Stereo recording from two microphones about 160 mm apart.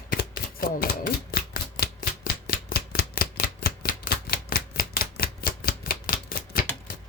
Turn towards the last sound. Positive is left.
turn(degrees=65)  # may be behind; listen again after turning